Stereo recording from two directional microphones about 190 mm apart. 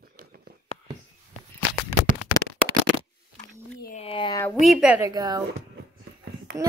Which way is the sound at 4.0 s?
25° left (ahead or behind).